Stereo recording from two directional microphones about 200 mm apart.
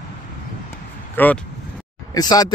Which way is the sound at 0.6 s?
10° left (ahead or behind).